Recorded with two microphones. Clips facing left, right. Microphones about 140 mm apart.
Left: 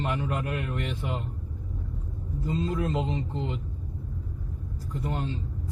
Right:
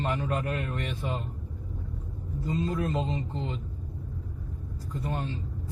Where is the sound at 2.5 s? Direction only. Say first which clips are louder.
Left 1 dB; 20° left (ahead or behind).